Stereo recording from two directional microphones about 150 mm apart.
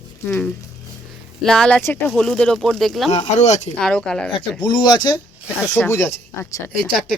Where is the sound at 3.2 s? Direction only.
50° left (ahead or behind).